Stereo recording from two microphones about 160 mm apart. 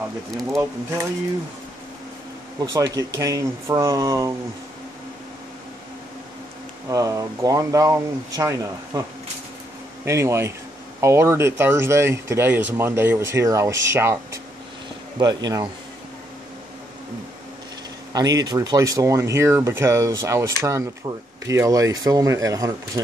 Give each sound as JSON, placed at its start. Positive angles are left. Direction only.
{"t": 0.3, "sound": "speech", "side_deg": 0}
{"t": 2.6, "sound": "speech", "side_deg": -20}
{"t": 6.9, "sound": "speech", "side_deg": -20}
{"t": 10.0, "sound": "speech", "side_deg": -15}
{"t": 18.1, "sound": "speech", "side_deg": -25}